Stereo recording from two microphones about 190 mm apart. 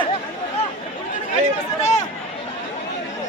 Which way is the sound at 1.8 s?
35° left (ahead or behind).